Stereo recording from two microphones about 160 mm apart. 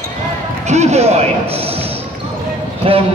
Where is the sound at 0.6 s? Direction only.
45° right (ahead or behind).